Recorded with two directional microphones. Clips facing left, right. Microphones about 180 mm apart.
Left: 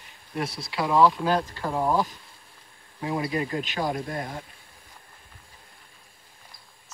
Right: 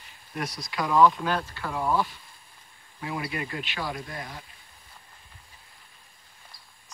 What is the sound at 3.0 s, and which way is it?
Speech, 30° left (ahead or behind).